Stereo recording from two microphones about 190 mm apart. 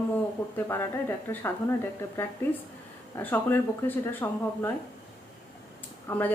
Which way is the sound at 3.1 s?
10° left (ahead or behind).